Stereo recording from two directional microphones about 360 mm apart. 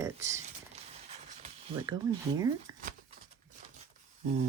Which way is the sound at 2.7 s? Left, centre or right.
Centre.